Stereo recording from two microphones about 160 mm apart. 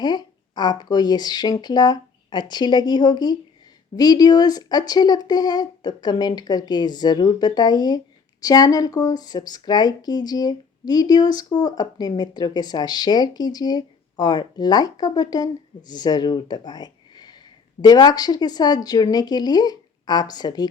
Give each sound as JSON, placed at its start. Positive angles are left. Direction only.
{"t": 0.0, "sound": "speech", "side_deg": 25}